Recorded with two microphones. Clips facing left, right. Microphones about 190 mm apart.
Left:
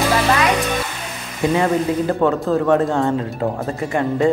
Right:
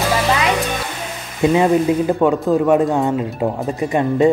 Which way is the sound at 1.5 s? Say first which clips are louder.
Right 3 dB; 15° right (ahead or behind).